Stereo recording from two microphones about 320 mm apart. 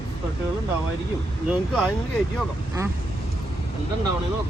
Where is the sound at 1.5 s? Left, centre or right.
Centre.